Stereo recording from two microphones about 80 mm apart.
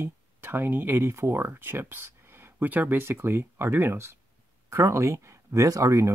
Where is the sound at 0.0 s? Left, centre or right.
Right.